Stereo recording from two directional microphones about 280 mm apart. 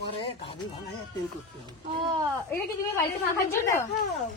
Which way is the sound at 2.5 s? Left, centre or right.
Centre.